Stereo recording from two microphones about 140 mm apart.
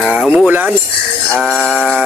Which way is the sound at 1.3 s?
Centre (ahead or behind).